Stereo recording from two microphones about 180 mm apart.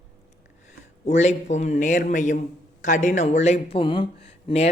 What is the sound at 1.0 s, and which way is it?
Speech, 40° left (ahead or behind).